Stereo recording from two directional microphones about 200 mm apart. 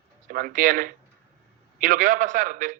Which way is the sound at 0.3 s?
45° right (ahead or behind).